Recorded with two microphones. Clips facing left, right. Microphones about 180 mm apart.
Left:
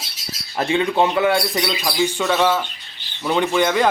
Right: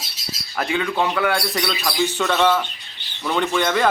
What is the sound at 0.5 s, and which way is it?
Speech, 25° left (ahead or behind).